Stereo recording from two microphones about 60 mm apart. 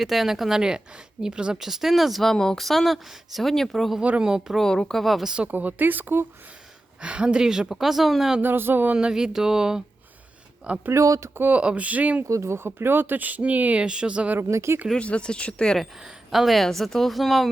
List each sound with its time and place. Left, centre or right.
0.0 s speech: centre
4.2 s speech: centre
4.6 s speech: centre
5.5 s speech: right
7.0 s speech: centre
8.4 s speech: right
8.9 s speech: centre
10.9 s speech: right
11.5 s speech: right
12.3 s speech: right; by 14.3 s centre
14.3 s speech: right
14.9 s speech: centre
16.0 s speech: centre